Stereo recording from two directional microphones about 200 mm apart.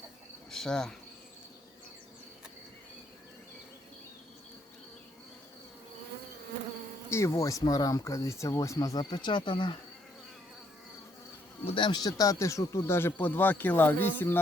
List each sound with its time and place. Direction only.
0.5 s speech: centre (ahead or behind)
7.1 s speech: 15° left (ahead or behind)
11.6 s speech: 25° left (ahead or behind)